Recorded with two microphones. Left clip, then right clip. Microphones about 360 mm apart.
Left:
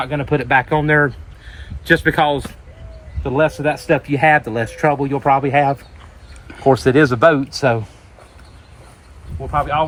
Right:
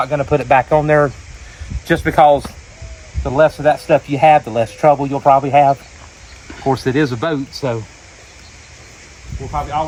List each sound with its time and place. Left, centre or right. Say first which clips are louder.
0.0 s speech: right 4 dB; centre
7.3 s speech: left 4 dB; left